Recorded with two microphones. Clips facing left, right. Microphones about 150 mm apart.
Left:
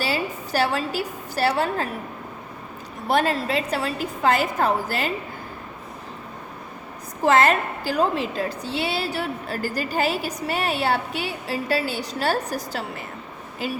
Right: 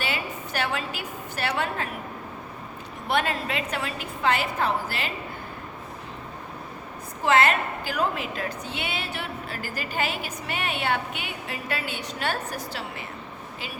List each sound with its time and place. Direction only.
0.0 s a woman's voice: 35° left (ahead or behind)
3.1 s a woman's voice: 35° left (ahead or behind)
7.3 s a woman's voice: 40° left (ahead or behind)